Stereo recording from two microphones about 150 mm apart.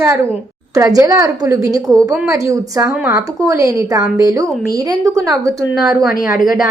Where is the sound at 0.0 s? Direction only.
20° right (ahead or behind).